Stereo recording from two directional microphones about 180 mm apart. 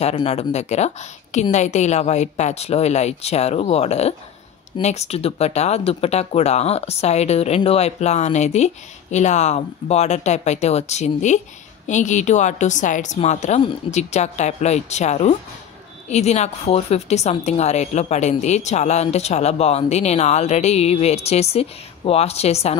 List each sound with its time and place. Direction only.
0.0 s speech: 35° left (ahead or behind)